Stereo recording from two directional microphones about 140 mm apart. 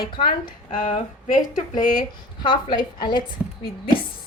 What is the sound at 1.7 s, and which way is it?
Speech, 75° left (ahead or behind).